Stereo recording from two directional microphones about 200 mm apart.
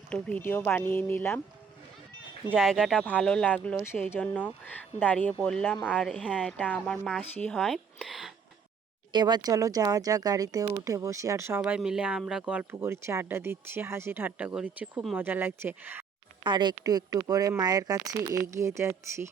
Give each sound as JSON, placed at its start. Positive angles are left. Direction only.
{"t": 0.1, "sound": "speech", "side_deg": 5}
{"t": 2.6, "sound": "a woman's voice", "side_deg": 0}
{"t": 9.1, "sound": "speech", "side_deg": -20}
{"t": 16.4, "sound": "speech", "side_deg": -20}